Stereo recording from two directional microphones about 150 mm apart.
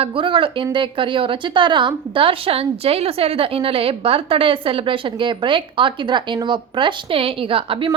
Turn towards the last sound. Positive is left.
turn(degrees=-35)  # may be behind; listen again after turning